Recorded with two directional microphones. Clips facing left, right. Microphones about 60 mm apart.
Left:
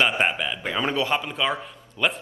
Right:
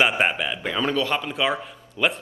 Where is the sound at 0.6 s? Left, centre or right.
Centre.